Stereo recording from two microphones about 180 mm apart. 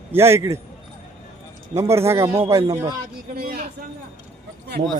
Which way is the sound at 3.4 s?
55° right (ahead or behind).